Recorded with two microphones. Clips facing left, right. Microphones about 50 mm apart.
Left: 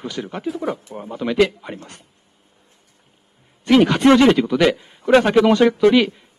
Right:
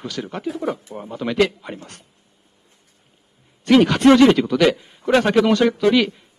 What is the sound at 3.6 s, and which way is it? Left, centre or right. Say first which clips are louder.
Speech: even; centre.